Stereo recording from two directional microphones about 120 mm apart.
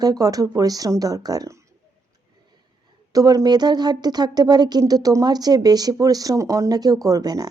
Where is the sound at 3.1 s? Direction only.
30° right (ahead or behind).